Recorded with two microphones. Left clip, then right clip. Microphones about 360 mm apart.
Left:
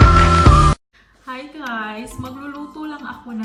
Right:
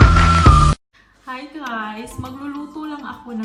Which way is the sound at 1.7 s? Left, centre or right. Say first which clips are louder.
Even; right.